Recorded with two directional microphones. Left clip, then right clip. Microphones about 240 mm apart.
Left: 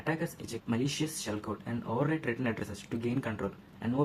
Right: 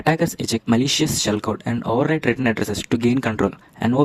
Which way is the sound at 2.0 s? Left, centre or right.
Right.